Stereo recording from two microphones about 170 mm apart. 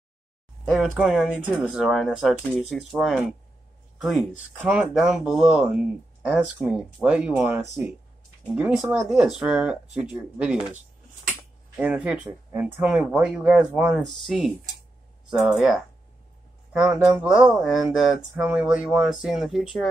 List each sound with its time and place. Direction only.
0.7 s speech: centre (ahead or behind)
11.7 s speech: 10° right (ahead or behind)
17.0 s speech: 5° right (ahead or behind)